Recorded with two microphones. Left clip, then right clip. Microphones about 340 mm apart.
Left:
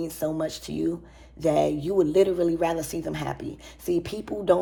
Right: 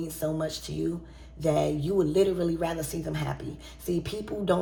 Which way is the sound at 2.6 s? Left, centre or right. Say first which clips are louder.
Left 5 dB; left.